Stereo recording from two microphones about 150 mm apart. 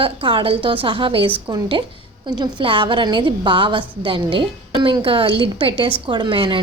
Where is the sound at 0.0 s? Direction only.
35° right (ahead or behind).